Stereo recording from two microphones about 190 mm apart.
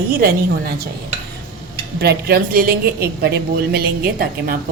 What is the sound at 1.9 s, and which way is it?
A woman's voice, 55° right (ahead or behind).